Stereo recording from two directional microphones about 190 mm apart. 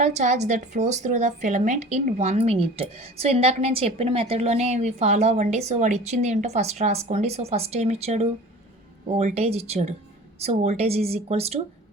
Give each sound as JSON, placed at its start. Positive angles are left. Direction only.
{"t": 0.0, "sound": "a woman's voice", "side_deg": -40}